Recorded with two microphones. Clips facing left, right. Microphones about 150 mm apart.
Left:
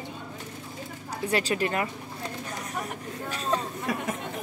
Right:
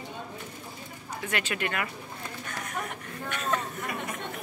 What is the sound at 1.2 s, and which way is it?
Speech, 35° left (ahead or behind).